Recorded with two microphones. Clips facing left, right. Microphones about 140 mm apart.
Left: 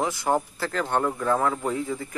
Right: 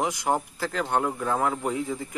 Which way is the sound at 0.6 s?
5° right (ahead or behind).